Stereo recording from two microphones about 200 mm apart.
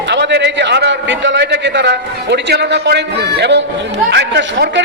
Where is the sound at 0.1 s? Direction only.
60° right (ahead or behind).